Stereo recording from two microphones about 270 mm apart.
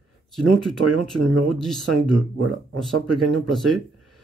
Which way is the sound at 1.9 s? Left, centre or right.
Right.